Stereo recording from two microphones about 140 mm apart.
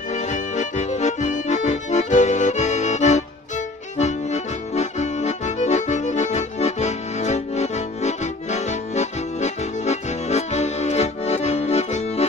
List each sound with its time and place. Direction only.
0.1 s accordion: 60° left (ahead or behind)